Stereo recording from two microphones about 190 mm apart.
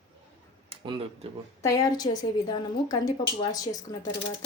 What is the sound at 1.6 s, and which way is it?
A woman's voice, 20° left (ahead or behind).